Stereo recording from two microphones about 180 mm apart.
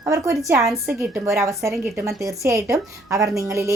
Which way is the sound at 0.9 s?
15° right (ahead or behind).